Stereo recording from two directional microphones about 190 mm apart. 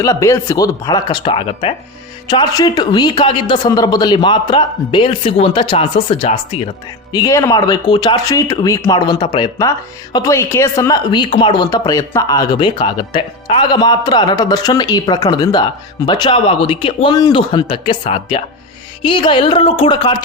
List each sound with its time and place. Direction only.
0.0 s speech: 15° left (ahead or behind)
7.1 s speech: 15° left (ahead or behind)